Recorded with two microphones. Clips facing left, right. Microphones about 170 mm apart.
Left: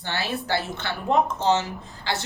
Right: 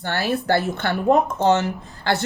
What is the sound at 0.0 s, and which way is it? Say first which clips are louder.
Speech: right 6 dB; 60° right (ahead or behind).